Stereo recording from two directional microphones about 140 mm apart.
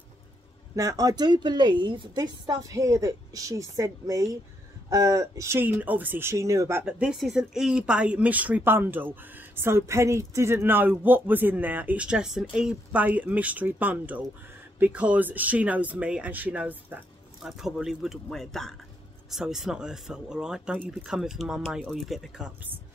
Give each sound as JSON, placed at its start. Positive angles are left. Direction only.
{"t": 0.7, "sound": "a woman's voice", "side_deg": -25}
{"t": 6.8, "sound": "speech", "side_deg": -10}